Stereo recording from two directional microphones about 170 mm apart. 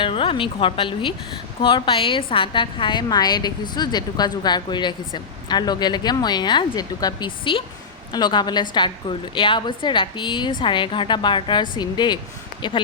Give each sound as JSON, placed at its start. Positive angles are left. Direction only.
{"t": 0.0, "sound": "a woman's voice", "side_deg": 30}